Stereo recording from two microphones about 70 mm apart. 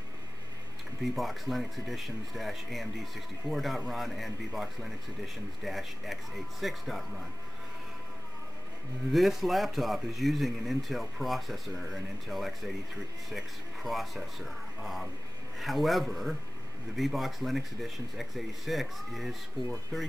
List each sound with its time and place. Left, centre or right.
1.0 s speech: centre
9.1 s speech: centre